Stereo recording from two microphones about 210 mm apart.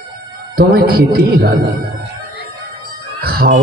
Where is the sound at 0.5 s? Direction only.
45° right (ahead or behind).